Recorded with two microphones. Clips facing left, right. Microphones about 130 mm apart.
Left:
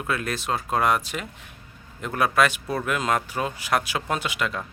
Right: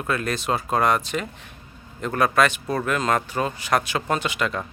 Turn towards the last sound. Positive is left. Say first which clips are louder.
# right 2 dB
turn(degrees=5)  # may be behind; listen again after turning